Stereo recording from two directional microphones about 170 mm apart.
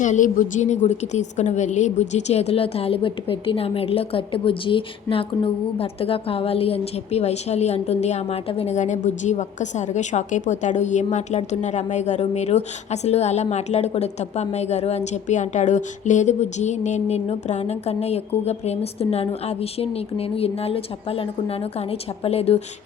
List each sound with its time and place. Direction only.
0.0 s a woman's voice: 50° left (ahead or behind)